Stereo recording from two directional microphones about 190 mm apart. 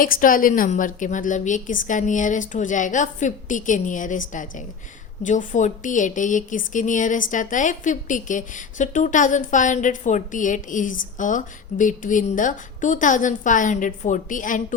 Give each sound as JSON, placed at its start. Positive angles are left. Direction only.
{"t": 0.0, "sound": "a woman's voice", "side_deg": 45}